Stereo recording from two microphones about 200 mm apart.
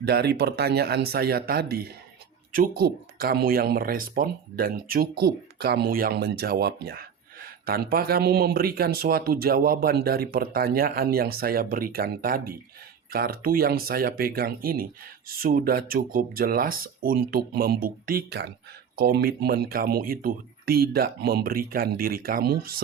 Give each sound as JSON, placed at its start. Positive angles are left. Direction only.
{"t": 0.0, "sound": "speech", "side_deg": -55}